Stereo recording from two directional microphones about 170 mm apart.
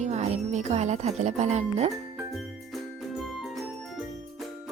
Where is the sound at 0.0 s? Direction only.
40° right (ahead or behind).